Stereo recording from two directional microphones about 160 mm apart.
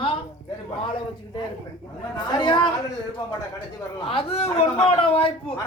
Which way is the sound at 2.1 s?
30° left (ahead or behind).